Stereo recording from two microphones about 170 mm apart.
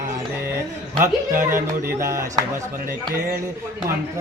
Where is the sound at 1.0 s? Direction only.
15° right (ahead or behind).